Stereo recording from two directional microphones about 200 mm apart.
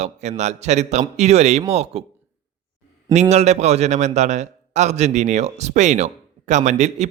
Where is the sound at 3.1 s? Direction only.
35° right (ahead or behind).